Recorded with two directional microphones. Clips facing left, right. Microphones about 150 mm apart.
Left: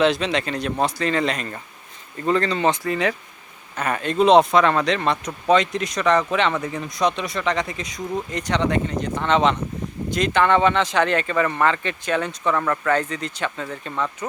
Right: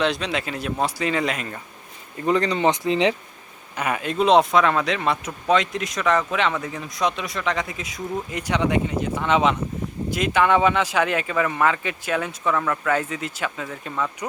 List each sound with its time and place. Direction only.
0.0 s speech: centre (ahead or behind); by 3.2 s 20° right (ahead or behind)
3.8 s speech: 10° right (ahead or behind)